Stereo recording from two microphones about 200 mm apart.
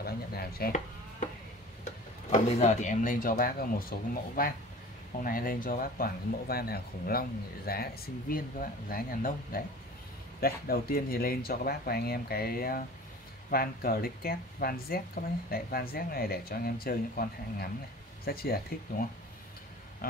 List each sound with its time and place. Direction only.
0.0 s chopping: 50° left (ahead or behind)
2.3 s speech: 35° left (ahead or behind)